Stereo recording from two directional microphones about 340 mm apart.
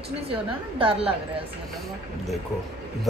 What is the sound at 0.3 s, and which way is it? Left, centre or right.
Speech, centre.